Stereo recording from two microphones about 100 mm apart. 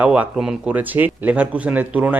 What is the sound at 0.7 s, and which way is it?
Speech, 15° right (ahead or behind).